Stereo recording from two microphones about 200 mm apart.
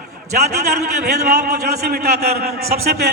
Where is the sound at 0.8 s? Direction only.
55° right (ahead or behind).